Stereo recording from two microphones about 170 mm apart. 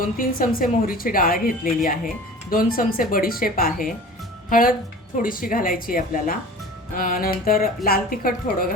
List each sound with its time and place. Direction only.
0.0 s a woman's voice: 55° left (ahead or behind)